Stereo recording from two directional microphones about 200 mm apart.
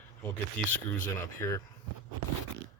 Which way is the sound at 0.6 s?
5° left (ahead or behind).